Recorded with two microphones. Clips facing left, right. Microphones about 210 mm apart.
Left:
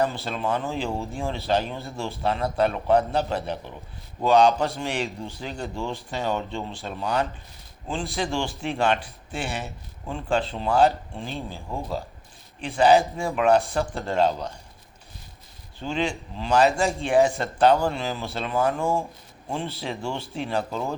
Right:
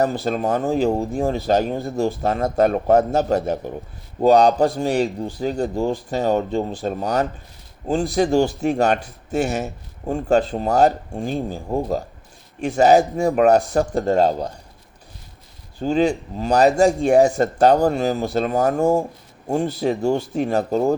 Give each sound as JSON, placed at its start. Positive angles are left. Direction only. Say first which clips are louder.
{"t": 0.3, "sound": "a man's voice", "louder": "right 7 dB", "side_deg": -45}
{"t": 15.8, "sound": "a man's voice", "louder": "right 9 dB", "side_deg": -40}